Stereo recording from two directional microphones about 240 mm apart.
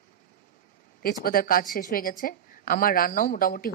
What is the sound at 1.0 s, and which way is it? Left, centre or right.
Speech, left.